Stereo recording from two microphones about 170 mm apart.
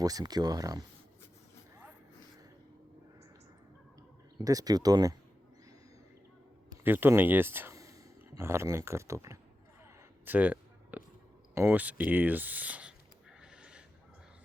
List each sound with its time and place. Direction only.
0.0 s speech: 20° right (ahead or behind)
4.4 s speech: 20° right (ahead or behind)
6.8 s speech: 10° right (ahead or behind)
10.2 s a sound: 10° right (ahead or behind)
11.5 s speech: 10° right (ahead or behind)
13.4 s a sound: 5° right (ahead or behind)